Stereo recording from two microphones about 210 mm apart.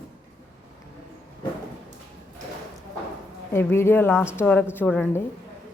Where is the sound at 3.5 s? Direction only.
10° left (ahead or behind).